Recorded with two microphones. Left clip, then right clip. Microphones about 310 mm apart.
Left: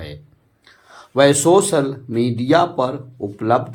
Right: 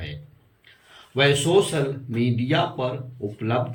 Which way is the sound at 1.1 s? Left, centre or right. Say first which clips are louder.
Left 6 dB; centre.